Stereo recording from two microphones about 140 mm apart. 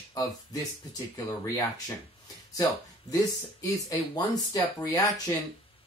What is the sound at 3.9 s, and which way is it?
Speech, 25° left (ahead or behind).